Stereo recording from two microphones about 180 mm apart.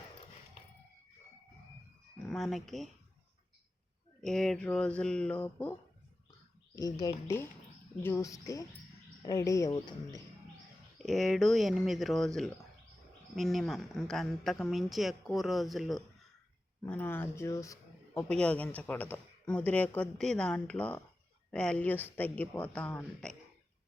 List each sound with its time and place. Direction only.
2.3 s speech: centre (ahead or behind)
4.2 s a woman's voice: centre (ahead or behind)
6.7 s a man's voice: 20° left (ahead or behind)
10.9 s a woman's voice: centre (ahead or behind)
18.3 s speech: 5° left (ahead or behind)